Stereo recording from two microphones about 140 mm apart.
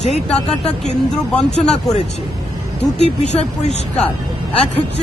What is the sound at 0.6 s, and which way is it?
Speech, 55° left (ahead or behind).